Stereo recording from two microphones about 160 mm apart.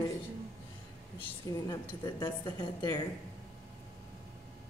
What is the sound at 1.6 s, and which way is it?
A woman's voice, 30° left (ahead or behind).